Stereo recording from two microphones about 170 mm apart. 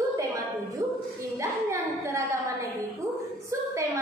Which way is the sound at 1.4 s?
20° right (ahead or behind).